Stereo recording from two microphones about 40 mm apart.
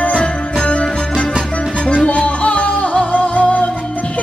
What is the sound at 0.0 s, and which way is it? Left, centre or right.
Music, left.